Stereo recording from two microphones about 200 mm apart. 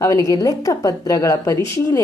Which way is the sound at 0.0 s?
15° left (ahead or behind).